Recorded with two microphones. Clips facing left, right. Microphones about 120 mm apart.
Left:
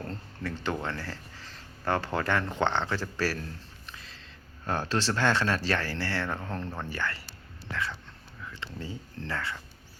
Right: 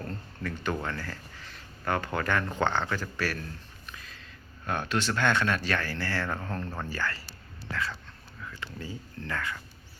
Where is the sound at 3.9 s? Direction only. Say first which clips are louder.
Right 2 dB; 25° left (ahead or behind).